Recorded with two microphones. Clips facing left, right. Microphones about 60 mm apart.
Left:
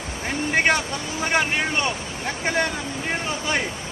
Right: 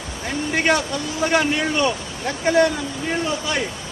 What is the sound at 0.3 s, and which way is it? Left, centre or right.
A man's voice, left.